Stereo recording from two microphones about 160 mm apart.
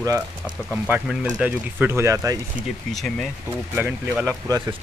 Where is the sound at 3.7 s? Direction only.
10° right (ahead or behind).